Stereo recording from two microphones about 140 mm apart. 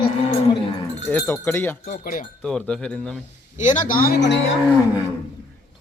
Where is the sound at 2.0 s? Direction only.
90° left.